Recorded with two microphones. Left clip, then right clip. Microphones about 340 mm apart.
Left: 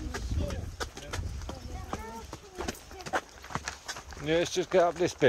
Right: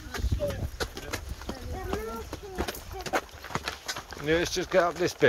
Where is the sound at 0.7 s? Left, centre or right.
Right.